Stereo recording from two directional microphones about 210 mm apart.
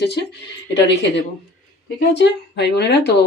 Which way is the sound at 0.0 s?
50° left (ahead or behind).